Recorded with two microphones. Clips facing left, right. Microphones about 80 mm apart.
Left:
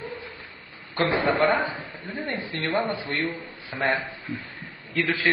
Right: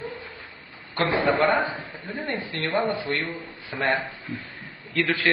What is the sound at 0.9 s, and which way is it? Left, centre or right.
A man's voice, centre.